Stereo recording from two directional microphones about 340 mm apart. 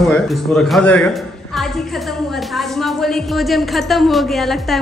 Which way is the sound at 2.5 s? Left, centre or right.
Centre.